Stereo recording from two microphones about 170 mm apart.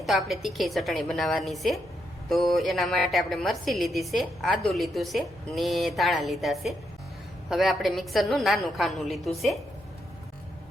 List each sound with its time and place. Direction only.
0.0 s a woman's voice: centre (ahead or behind)